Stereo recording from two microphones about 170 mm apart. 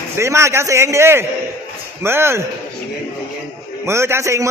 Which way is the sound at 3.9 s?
15° right (ahead or behind).